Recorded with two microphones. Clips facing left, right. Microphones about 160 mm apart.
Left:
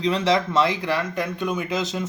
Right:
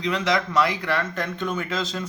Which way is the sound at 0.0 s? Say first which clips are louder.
Left 3 dB; 30° left (ahead or behind).